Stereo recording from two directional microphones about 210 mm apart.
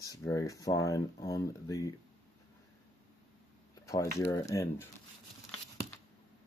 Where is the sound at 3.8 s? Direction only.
15° left (ahead or behind).